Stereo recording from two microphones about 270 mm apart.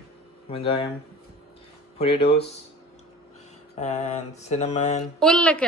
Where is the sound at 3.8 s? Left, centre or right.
Left.